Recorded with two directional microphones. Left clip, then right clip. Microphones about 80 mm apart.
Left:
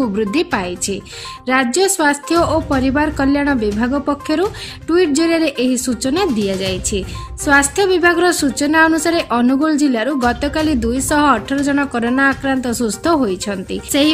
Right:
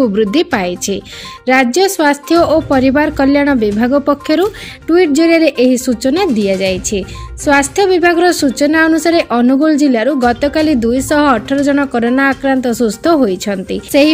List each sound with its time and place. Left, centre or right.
0.0 s speech: right
1.7 s speech: right
4.8 s speech: right
7.4 s a woman's voice: right